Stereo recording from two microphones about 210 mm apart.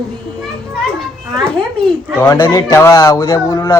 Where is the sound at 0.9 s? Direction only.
Centre (ahead or behind).